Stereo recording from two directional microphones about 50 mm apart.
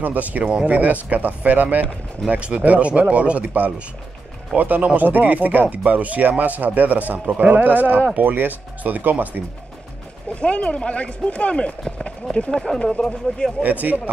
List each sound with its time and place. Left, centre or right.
0.0 s speech: right
2.2 s speech: right
10.4 s speech: left
12.0 s run: centre
12.4 s speech: centre
13.6 s speech: right